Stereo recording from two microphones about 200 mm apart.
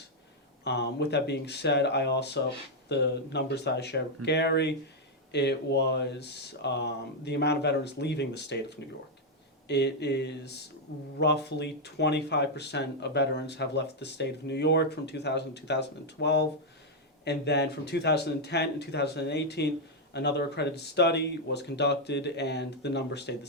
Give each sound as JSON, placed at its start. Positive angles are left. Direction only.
{"t": 0.6, "sound": "speech", "side_deg": 55}